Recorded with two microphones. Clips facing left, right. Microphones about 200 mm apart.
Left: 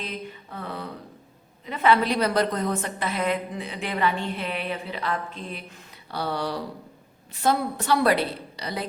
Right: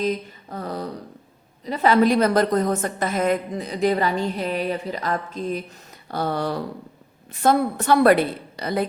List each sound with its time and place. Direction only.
0.0 s a woman's voice: 40° right (ahead or behind)